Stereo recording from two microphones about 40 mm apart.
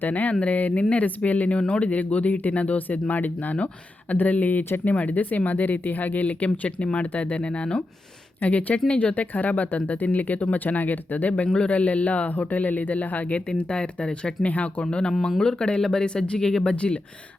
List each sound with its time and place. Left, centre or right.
0.0 s speech: left
11.5 s speech: left
13.6 s speech: left
16.7 s speech: left